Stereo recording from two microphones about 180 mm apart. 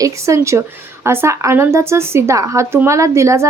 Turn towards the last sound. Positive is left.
turn(degrees=-15)  # may be behind; listen again after turning